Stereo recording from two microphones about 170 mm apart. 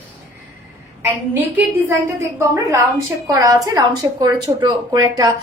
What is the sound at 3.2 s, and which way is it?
A woman's voice, 20° right (ahead or behind).